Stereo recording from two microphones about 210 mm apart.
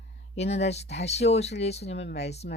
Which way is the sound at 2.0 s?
55° left (ahead or behind).